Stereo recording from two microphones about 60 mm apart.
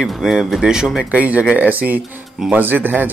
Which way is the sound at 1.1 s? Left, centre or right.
Right.